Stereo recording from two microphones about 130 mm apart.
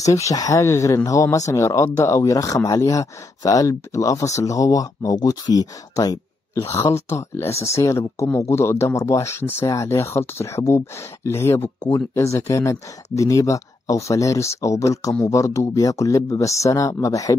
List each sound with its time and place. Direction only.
0.0 s speech: 25° left (ahead or behind)